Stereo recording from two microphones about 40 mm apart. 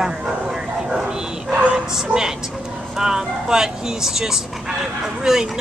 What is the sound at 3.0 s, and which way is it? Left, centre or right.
Speech, centre.